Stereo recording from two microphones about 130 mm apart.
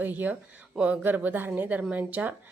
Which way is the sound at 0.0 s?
15° right (ahead or behind).